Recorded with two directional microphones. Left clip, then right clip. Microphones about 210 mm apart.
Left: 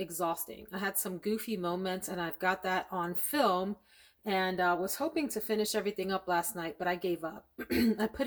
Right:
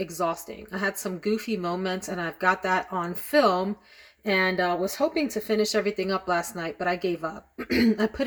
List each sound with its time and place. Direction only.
0.0 s speech: centre (ahead or behind)